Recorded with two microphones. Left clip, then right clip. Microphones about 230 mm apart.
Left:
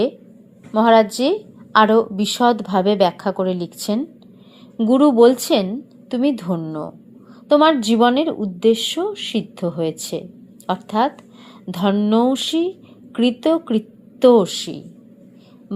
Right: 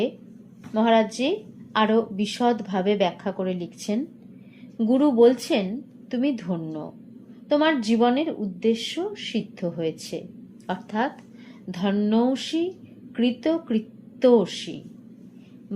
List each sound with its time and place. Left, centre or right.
0.7 s a woman's voice: left